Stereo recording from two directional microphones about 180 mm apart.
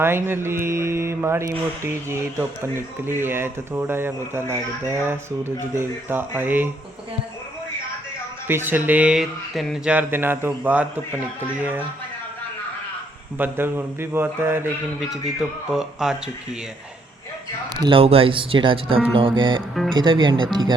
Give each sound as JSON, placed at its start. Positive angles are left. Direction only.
{"t": 0.0, "sound": "speech", "side_deg": -10}
{"t": 8.4, "sound": "speech", "side_deg": -10}
{"t": 13.4, "sound": "speech", "side_deg": -10}
{"t": 15.0, "sound": "speech", "side_deg": 0}
{"t": 17.7, "sound": "speech", "side_deg": -25}